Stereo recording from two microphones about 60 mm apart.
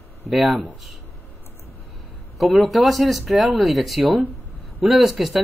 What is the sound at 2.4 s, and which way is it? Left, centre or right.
Speech, centre.